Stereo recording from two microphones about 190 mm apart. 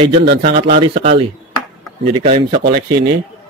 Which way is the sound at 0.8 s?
30° right (ahead or behind).